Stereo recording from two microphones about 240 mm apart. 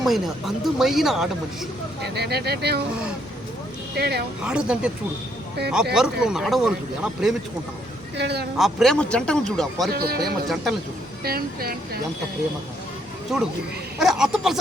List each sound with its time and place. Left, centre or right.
0.0 s speech: centre
2.0 s speech: right
3.9 s speech: right
4.4 s speech: centre
8.1 s speech: right
8.5 s speech: centre
9.9 s speech: right
10.5 s speech: centre
11.2 s speech: right
13.3 s speech: centre